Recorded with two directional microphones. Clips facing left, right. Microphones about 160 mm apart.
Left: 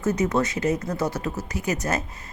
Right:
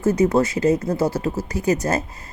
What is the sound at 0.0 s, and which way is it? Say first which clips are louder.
Speech: right 5 dB; 30° right (ahead or behind).